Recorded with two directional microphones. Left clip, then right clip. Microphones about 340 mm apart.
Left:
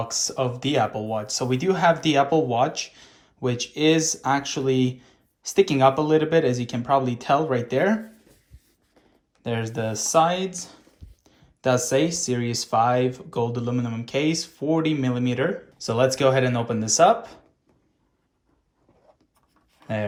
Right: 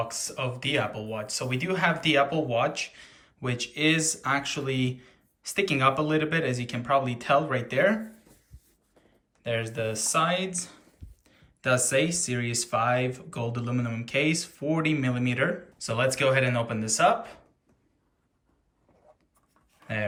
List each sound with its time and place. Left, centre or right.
0.0 s speech: centre
9.4 s speech: centre